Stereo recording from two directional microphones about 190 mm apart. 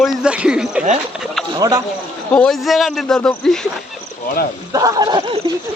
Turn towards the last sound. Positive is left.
turn(degrees=-20)  # may be behind; listen again after turning